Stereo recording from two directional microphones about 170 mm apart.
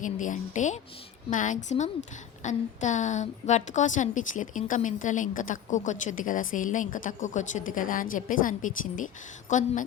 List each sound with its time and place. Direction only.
0.0 s a woman's voice: 50° left (ahead or behind)